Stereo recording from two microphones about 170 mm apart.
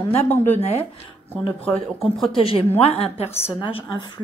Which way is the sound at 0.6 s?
35° left (ahead or behind).